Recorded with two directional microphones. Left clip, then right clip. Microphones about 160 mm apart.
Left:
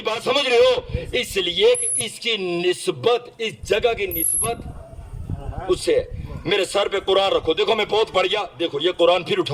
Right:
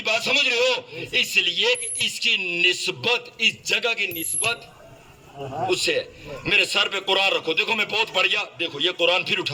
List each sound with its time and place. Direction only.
0.0 s a man's voice: 40° left (ahead or behind)
5.6 s a man's voice: 40° left (ahead or behind)